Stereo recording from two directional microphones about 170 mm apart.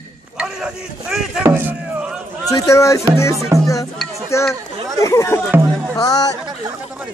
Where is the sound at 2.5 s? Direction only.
20° left (ahead or behind).